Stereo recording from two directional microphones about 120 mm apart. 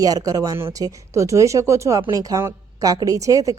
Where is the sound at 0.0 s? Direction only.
30° right (ahead or behind).